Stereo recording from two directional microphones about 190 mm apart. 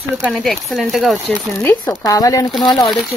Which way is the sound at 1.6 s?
15° left (ahead or behind).